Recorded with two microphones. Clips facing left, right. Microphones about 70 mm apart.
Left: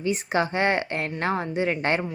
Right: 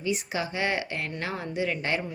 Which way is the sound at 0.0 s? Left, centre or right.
Left.